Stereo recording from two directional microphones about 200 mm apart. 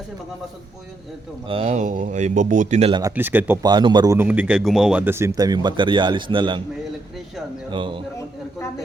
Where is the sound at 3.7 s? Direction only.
20° right (ahead or behind).